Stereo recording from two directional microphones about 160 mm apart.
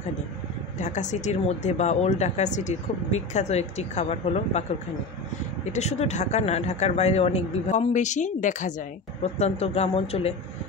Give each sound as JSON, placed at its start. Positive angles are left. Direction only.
{"t": 0.7, "sound": "speech", "side_deg": 45}
{"t": 5.7, "sound": "speech", "side_deg": 45}